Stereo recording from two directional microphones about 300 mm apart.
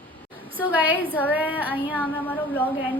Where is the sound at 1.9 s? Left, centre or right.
Centre.